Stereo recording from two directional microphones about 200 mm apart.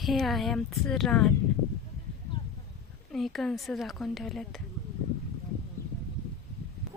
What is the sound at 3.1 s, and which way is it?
Speech, centre (ahead or behind).